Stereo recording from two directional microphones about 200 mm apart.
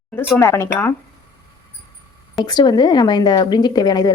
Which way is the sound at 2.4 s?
20° left (ahead or behind).